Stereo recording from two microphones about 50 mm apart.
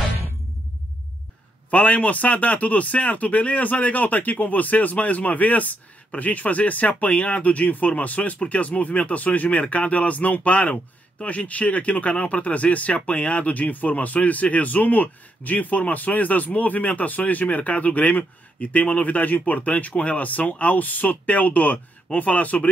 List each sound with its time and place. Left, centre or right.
1.7 s speech: left